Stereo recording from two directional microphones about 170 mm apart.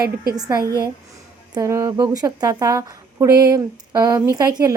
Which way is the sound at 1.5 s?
20° right (ahead or behind).